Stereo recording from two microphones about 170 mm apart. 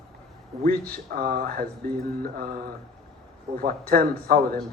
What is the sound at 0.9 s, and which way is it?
Speech, 60° right (ahead or behind).